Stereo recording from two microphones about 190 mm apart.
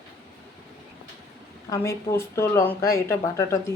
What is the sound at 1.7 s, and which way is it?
Speech, 15° left (ahead or behind).